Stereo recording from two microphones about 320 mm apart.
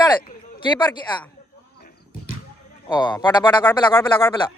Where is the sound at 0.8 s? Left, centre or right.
Centre.